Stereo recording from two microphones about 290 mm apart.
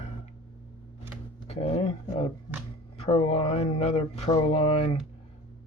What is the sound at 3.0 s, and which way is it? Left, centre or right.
Speech, centre.